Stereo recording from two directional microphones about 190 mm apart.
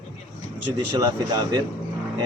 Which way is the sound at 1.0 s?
20° right (ahead or behind).